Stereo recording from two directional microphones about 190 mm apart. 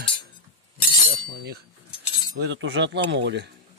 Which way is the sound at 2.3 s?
75° right (ahead or behind).